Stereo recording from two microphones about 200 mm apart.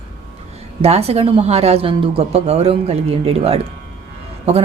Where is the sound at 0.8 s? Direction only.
30° right (ahead or behind).